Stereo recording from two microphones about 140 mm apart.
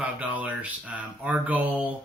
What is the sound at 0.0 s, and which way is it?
Speech, 10° right (ahead or behind).